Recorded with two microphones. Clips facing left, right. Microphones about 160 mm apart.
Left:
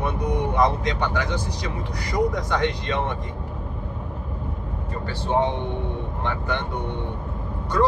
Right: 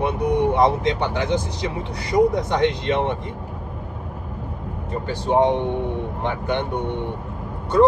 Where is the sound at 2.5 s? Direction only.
20° right (ahead or behind).